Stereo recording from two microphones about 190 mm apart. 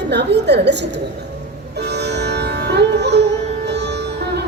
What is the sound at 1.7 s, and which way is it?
Music, 60° right (ahead or behind).